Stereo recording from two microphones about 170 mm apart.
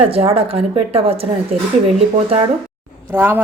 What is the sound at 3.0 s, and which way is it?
Speech, 10° right (ahead or behind).